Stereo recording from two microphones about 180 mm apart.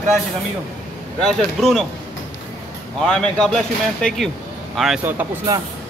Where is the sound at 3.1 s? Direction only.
5° left (ahead or behind).